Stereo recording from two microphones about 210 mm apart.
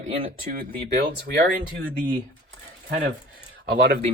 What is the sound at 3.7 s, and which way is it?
Speech, 50° right (ahead or behind).